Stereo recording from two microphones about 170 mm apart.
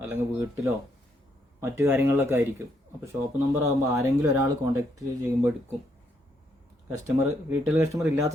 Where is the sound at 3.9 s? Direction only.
20° right (ahead or behind).